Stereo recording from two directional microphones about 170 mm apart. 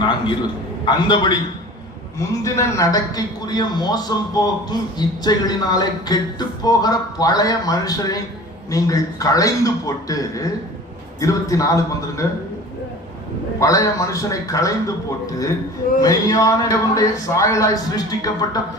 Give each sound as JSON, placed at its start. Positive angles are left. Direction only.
{"t": 0.9, "sound": "a man's voice", "side_deg": 25}
{"t": 13.6, "sound": "a man's voice", "side_deg": 20}
{"t": 16.0, "sound": "a man's voice", "side_deg": 20}